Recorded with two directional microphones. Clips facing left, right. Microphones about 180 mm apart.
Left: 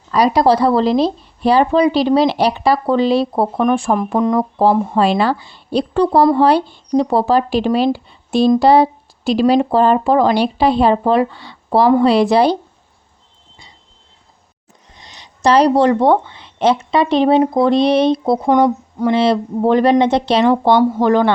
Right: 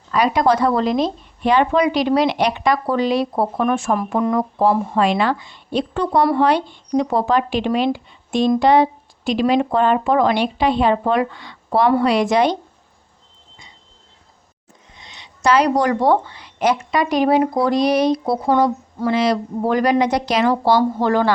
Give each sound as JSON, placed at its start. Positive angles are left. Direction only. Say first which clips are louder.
{"t": 0.1, "sound": "speech", "louder": "left 4 dB", "side_deg": 35}
{"t": 14.9, "sound": "speech", "louder": "left 2 dB", "side_deg": 40}
{"t": 19.1, "sound": "speech", "louder": "left 3 dB", "side_deg": 30}